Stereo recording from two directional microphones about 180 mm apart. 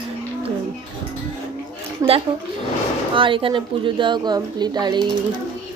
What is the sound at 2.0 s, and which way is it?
Speech, 20° right (ahead or behind).